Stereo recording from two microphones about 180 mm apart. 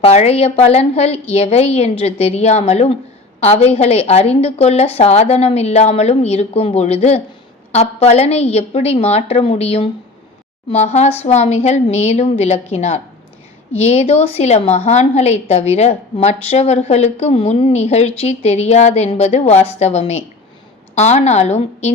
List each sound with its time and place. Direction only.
0.0 s a woman's voice: 35° left (ahead or behind)